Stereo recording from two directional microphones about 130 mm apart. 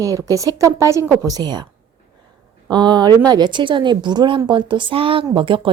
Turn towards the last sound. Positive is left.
turn(degrees=-40)  # may be behind; listen again after turning